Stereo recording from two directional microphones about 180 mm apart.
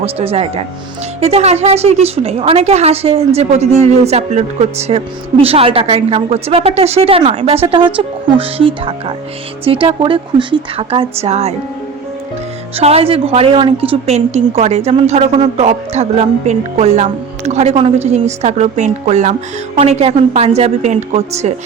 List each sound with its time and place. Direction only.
0.0 s a woman's voice: 35° right (ahead or behind)
12.7 s a woman's voice: 35° right (ahead or behind)